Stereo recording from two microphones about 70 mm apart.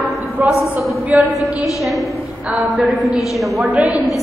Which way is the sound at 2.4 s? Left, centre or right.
Right.